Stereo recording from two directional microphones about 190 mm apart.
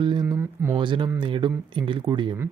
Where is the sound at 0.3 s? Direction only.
10° right (ahead or behind).